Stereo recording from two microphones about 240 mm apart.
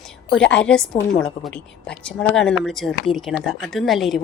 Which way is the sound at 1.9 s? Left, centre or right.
Centre.